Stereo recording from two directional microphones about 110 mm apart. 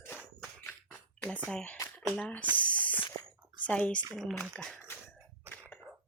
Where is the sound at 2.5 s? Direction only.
10° left (ahead or behind).